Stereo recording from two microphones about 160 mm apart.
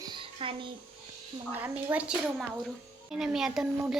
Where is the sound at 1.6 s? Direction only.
10° right (ahead or behind).